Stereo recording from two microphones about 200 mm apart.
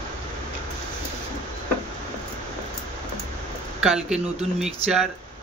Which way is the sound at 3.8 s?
5° right (ahead or behind).